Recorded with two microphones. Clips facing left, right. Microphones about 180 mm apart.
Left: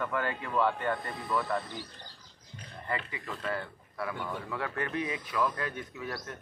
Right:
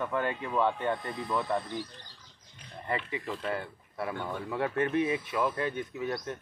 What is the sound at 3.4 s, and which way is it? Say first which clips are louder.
Speech: right 1 dB; 25° right (ahead or behind).